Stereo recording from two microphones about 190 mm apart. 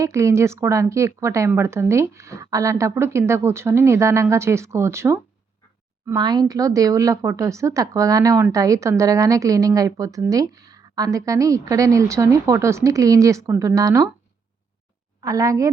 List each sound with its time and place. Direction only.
0.0 s speech: 15° right (ahead or behind)
15.2 s speech: 20° right (ahead or behind)